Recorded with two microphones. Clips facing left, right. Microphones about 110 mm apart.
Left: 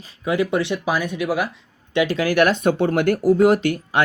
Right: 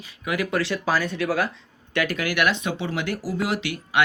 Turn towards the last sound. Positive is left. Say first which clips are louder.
# left 4 dB
turn(degrees=40)  # may be behind; listen again after turning